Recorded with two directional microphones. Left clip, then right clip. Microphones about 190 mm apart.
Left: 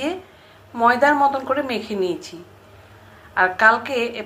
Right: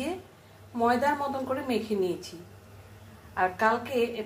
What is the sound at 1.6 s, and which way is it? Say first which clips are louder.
Speech: left 5 dB; 15° left (ahead or behind).